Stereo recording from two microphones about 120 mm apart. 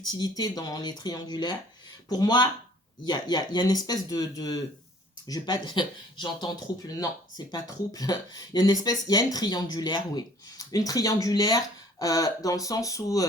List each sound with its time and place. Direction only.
0.0 s speech: 35° left (ahead or behind)